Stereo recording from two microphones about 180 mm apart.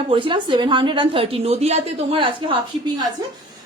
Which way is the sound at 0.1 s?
30° right (ahead or behind).